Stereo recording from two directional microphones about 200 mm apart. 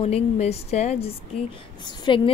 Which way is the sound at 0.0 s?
30° left (ahead or behind).